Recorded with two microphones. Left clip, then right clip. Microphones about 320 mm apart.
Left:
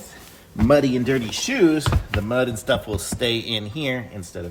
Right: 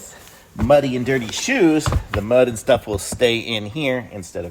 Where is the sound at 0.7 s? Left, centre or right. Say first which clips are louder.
Right 2 dB; centre.